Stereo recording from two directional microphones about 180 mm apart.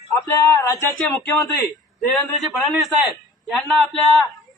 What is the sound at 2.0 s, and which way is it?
A man's voice, centre (ahead or behind).